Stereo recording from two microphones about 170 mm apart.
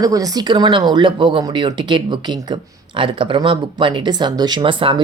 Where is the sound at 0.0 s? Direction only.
20° right (ahead or behind).